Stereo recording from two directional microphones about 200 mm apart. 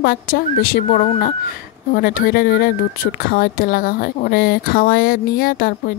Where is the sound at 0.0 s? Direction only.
50° left (ahead or behind).